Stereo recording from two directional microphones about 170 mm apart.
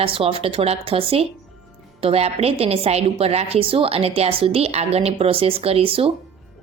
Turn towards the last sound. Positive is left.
turn(degrees=-35)  # may be behind; listen again after turning